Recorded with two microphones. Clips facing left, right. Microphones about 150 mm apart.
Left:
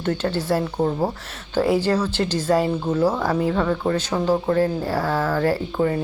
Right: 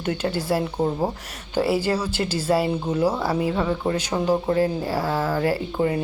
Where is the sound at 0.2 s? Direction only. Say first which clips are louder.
Left 1 dB; 10° right (ahead or behind).